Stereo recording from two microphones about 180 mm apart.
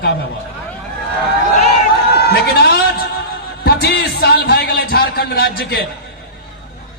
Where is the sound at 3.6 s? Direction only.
60° left (ahead or behind).